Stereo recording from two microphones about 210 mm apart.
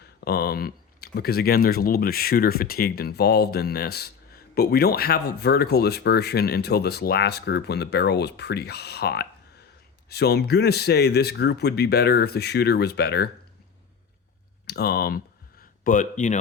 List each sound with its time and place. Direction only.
0.2 s speech: 50° left (ahead or behind)
14.7 s speech: 50° left (ahead or behind)